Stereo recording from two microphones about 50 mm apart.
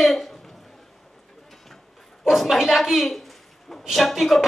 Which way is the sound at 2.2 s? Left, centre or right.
Centre.